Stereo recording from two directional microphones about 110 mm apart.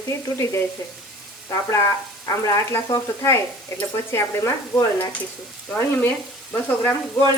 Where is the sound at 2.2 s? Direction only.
30° left (ahead or behind).